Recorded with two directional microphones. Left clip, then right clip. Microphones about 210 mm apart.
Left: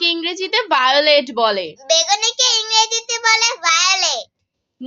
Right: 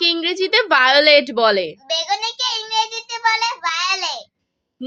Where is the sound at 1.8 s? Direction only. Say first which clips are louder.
Left 10 dB; 45° left (ahead or behind).